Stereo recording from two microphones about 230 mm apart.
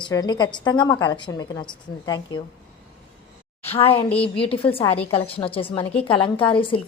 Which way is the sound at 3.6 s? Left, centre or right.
Left.